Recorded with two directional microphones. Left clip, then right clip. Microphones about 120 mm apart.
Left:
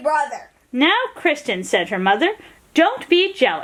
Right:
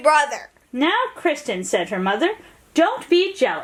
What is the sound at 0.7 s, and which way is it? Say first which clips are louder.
Speech: left 3 dB; 35° left (ahead or behind).